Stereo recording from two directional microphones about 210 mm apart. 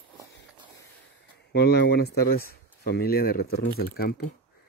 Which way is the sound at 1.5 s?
50° left (ahead or behind).